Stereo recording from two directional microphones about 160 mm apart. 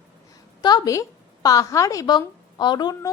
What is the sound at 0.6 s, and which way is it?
A woman's voice, 25° left (ahead or behind).